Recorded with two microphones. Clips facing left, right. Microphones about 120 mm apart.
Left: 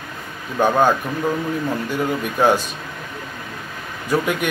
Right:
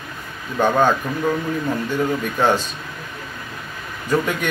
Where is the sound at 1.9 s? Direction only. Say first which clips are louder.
Even; 10° left (ahead or behind).